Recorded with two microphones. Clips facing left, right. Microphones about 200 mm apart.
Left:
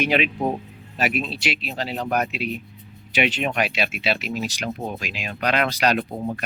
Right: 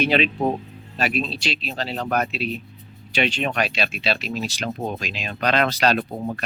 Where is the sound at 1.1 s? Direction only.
25° right (ahead or behind).